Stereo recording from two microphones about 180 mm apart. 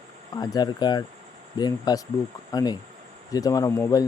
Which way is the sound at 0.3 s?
20° left (ahead or behind).